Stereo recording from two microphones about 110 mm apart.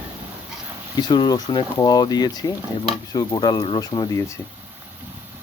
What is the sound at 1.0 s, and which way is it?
Speech, 40° left (ahead or behind).